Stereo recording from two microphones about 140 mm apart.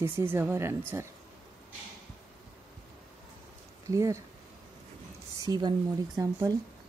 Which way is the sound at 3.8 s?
20° right (ahead or behind).